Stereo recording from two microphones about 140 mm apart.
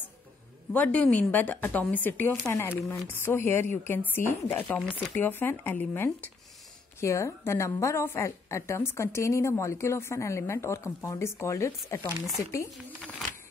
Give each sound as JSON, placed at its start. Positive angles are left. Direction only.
{"t": 0.7, "sound": "a woman's voice", "side_deg": 10}